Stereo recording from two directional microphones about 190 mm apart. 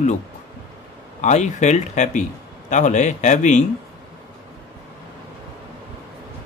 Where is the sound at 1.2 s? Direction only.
40° left (ahead or behind).